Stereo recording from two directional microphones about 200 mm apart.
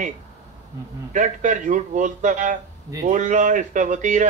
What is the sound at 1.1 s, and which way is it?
Speech, 40° right (ahead or behind).